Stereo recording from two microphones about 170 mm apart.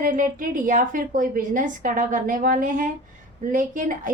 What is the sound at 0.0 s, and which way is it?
A woman's voice, 50° right (ahead or behind).